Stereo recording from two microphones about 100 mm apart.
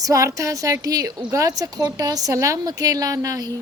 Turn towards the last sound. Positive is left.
turn(degrees=-35)  # may be behind; listen again after turning